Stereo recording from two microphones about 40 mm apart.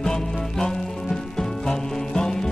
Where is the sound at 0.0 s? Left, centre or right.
Centre.